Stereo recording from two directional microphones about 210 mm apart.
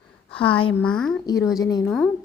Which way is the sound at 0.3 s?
25° left (ahead or behind).